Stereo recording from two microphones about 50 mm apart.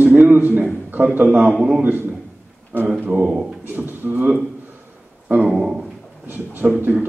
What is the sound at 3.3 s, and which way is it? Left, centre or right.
Speech, centre.